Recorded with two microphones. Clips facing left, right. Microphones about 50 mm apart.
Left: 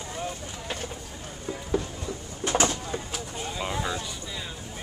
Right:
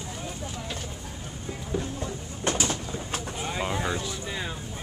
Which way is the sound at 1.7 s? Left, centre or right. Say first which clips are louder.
Left 3 dB; left.